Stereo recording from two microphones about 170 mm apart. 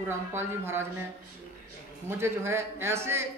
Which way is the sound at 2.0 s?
15° right (ahead or behind).